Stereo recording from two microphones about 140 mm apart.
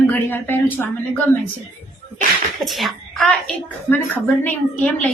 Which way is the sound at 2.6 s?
Centre (ahead or behind).